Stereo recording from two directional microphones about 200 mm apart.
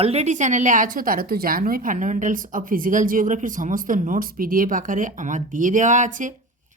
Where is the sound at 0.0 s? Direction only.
30° right (ahead or behind).